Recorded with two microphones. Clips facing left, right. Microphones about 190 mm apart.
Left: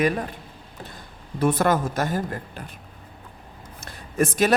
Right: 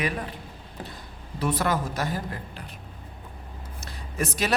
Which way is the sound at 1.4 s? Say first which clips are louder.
Left 5 dB; 50° left (ahead or behind).